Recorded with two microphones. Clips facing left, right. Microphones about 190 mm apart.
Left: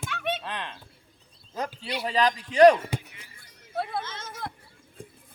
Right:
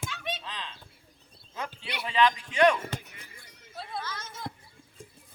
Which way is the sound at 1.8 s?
40° left (ahead or behind).